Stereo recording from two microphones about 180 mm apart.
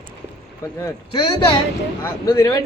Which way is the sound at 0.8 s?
20° left (ahead or behind).